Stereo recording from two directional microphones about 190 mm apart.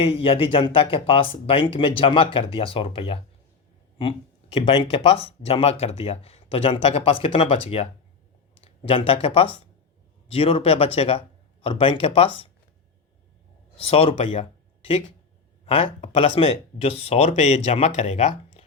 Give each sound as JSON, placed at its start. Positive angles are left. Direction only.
{"t": 0.0, "sound": "speech", "side_deg": 30}
{"t": 13.7, "sound": "speech", "side_deg": 30}
{"t": 15.6, "sound": "speech", "side_deg": 30}